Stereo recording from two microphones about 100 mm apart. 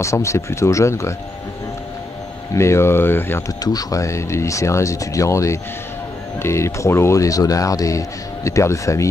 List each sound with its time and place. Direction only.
0.0 s speech: 30° left (ahead or behind)
2.5 s speech: 30° left (ahead or behind)
3.6 s speech: 35° left (ahead or behind)